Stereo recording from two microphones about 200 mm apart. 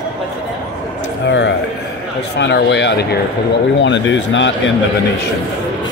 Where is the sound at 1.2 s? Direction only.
65° left (ahead or behind).